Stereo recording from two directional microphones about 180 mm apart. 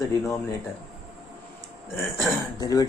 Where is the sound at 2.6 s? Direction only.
20° left (ahead or behind).